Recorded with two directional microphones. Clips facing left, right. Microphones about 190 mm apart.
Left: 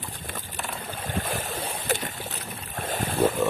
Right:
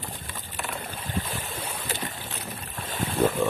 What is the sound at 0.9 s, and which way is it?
Boat, 50° left (ahead or behind).